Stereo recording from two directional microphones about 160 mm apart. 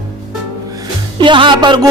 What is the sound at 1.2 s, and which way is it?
Music, 30° right (ahead or behind).